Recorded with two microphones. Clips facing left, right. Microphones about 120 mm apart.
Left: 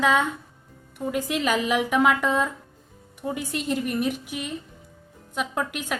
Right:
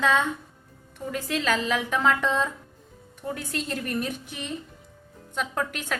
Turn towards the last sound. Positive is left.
turn(degrees=5)  # may be behind; listen again after turning